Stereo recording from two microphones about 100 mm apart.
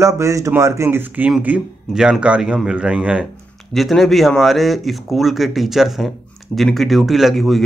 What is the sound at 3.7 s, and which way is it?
Speech, centre (ahead or behind).